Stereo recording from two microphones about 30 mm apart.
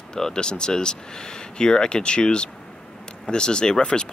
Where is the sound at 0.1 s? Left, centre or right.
Left.